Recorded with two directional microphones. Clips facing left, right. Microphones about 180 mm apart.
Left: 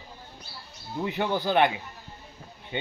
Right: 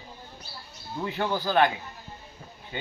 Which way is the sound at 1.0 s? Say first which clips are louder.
Left 1 dB; 15° left (ahead or behind).